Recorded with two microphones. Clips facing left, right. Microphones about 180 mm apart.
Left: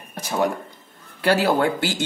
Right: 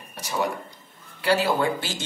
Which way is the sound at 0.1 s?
50° left (ahead or behind).